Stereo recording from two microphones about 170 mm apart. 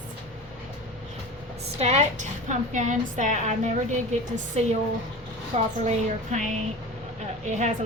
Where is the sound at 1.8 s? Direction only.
40° right (ahead or behind).